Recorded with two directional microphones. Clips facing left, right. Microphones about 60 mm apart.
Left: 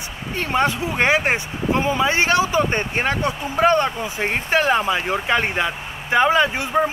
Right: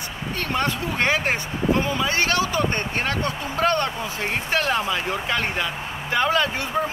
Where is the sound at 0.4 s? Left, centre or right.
Centre.